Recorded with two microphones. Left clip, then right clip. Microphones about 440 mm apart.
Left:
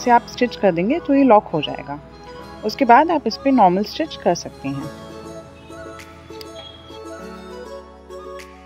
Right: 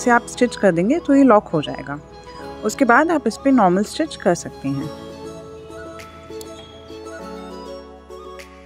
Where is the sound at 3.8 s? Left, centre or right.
Right.